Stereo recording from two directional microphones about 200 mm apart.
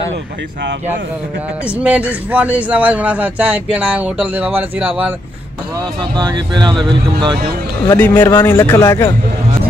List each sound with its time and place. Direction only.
1.8 s a man's voice: 5° right (ahead or behind)
6.1 s speech: 20° right (ahead or behind)
8.0 s speech: 10° left (ahead or behind)